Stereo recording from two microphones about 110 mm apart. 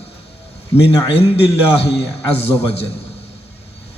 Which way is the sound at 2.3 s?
65° left (ahead or behind).